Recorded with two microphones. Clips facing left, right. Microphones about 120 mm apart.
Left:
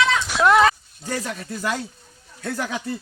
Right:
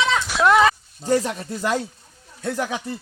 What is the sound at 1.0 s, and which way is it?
Speech, 25° right (ahead or behind).